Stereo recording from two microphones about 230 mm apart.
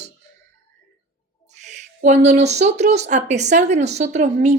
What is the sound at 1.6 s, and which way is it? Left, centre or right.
Speech, right.